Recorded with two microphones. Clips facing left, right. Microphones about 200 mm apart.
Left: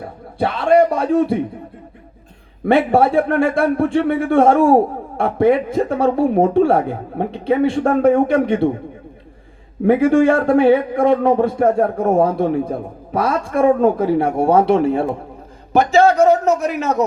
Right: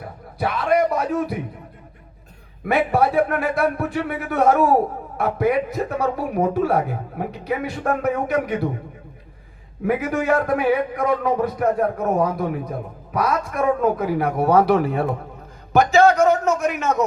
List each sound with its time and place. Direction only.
0.3 s a sound: 30° left (ahead or behind)
2.6 s a man's voice: 30° left (ahead or behind)
9.8 s a man's voice: 30° left (ahead or behind)